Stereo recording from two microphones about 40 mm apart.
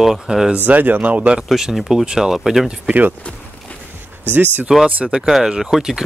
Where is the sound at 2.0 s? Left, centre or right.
Centre.